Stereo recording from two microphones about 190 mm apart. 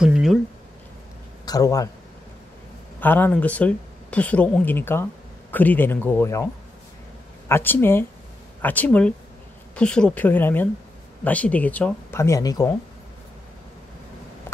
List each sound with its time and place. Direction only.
0.0 s speech: centre (ahead or behind)
1.4 s speech: 20° left (ahead or behind)
3.0 s speech: 10° left (ahead or behind)